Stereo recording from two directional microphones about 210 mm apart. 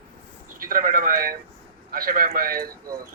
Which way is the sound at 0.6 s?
40° right (ahead or behind).